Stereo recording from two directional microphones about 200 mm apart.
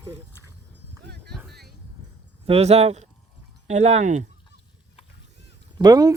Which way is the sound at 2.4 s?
30° right (ahead or behind).